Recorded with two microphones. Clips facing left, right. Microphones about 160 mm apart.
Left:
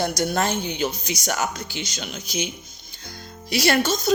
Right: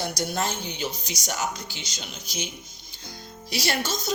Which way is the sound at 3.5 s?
60° left (ahead or behind).